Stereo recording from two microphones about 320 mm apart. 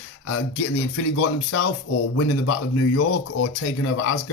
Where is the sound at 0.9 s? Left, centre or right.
Left.